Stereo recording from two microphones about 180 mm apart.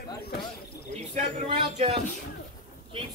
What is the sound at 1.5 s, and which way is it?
Speech, 30° right (ahead or behind).